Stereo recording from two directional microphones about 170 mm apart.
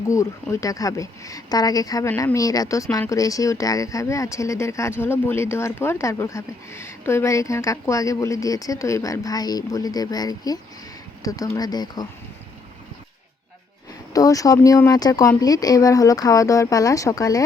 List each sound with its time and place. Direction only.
0.1 s a woman's voice: 20° left (ahead or behind)
14.1 s a woman's voice: 20° left (ahead or behind)